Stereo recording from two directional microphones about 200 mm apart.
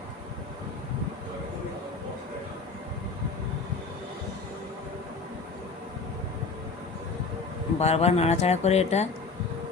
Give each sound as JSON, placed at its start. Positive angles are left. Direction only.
{"t": 7.8, "sound": "speech", "side_deg": 30}